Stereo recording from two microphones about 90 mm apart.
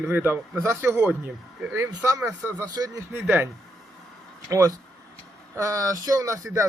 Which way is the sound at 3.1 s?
25° right (ahead or behind).